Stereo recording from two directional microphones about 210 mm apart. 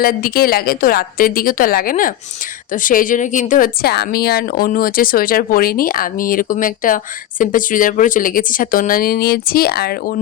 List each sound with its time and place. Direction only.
0.0 s a woman's voice: 45° left (ahead or behind)